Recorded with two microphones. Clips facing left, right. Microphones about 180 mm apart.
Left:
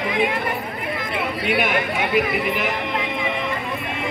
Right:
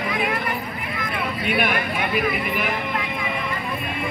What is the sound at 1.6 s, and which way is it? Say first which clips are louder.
Speech: even; 20° left (ahead or behind).